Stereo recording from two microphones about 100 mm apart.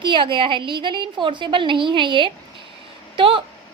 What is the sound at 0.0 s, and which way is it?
A woman's voice, 55° right (ahead or behind).